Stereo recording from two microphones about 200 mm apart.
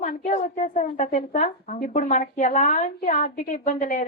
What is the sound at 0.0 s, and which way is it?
Speech, 40° left (ahead or behind).